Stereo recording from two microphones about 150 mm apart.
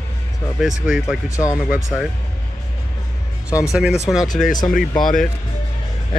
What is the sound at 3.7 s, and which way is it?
Speech, 5° right (ahead or behind).